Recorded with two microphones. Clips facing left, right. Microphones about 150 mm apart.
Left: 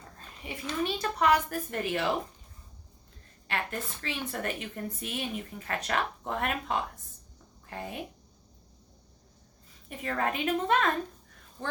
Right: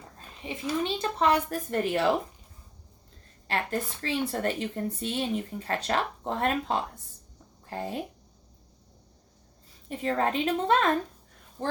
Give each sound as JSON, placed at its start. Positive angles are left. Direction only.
{"t": 0.4, "sound": "a child's voice", "side_deg": -25}
{"t": 3.4, "sound": "a woman's voice", "side_deg": -35}
{"t": 9.9, "sound": "a woman's voice", "side_deg": -30}